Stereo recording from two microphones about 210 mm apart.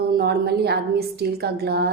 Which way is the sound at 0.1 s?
50° right (ahead or behind).